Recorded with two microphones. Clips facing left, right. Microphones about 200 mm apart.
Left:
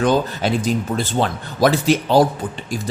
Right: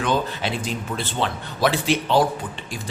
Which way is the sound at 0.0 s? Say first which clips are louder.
Left 5 dB; 40° left (ahead or behind).